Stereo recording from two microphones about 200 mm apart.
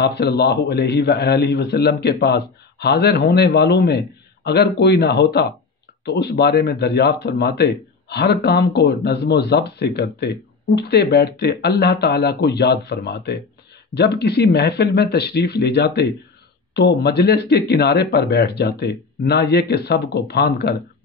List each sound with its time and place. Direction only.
0.0 s speech: 55° left (ahead or behind)